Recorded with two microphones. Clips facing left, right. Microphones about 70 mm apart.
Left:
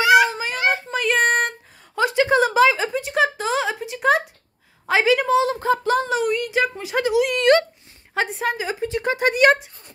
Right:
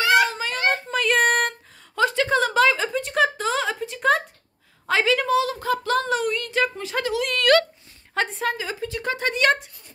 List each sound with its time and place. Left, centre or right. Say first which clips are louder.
0.0 s music: left 4 dB; centre
2.0 s a sound: left 3 dB; centre
4.8 s a woman's voice: left 3 dB; centre
6.0 s speech: left 3 dB; centre